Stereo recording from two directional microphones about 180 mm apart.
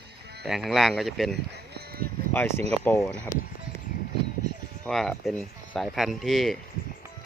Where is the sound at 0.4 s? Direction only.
Centre (ahead or behind).